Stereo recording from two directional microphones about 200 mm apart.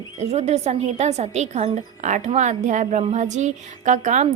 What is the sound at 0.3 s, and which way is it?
A woman's voice, 35° right (ahead or behind).